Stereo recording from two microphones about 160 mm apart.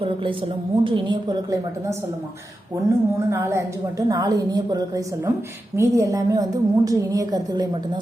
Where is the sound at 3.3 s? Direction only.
15° right (ahead or behind).